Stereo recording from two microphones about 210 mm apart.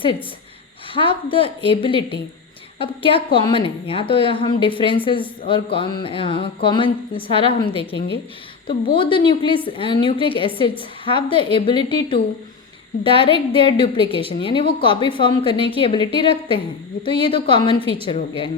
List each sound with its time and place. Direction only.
0.9 s a woman's voice: 25° left (ahead or behind)